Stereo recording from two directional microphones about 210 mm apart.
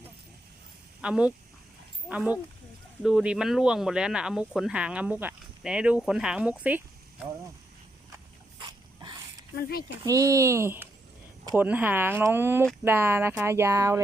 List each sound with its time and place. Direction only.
1.0 s speech: 5° right (ahead or behind)
8.1 s a sound: 20° right (ahead or behind)
9.6 s speech: 45° left (ahead or behind)
10.1 s speech: 15° right (ahead or behind)